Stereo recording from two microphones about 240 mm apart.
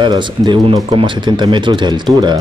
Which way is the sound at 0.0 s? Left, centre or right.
Centre.